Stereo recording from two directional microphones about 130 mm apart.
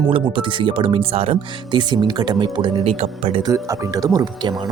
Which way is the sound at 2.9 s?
50° right (ahead or behind).